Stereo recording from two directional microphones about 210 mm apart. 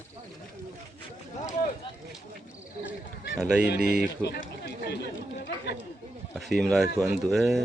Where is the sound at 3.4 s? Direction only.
5° right (ahead or behind).